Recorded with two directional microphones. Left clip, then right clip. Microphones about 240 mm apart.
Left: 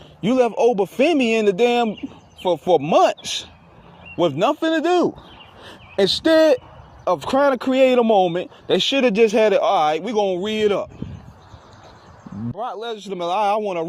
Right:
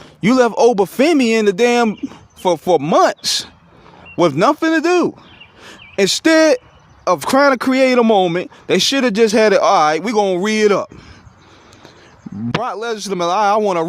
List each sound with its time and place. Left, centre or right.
0.3 s speech: right
12.6 s speech: right